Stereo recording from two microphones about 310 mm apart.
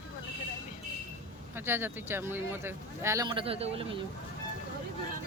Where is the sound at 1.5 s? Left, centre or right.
Centre.